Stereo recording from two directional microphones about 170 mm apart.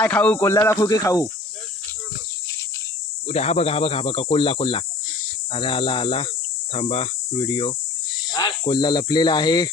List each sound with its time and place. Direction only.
0.0 s speech: 10° left (ahead or behind)
3.2 s speech: 40° left (ahead or behind); by 9.6 s 25° left (ahead or behind)